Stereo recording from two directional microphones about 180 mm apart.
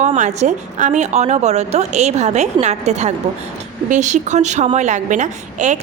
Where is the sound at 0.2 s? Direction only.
40° right (ahead or behind).